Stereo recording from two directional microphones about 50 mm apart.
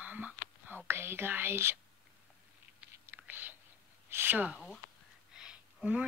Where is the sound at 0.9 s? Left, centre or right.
Right.